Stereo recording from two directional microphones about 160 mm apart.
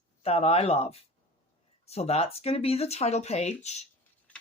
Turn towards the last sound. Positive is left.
turn(degrees=45)  # may be behind; listen again after turning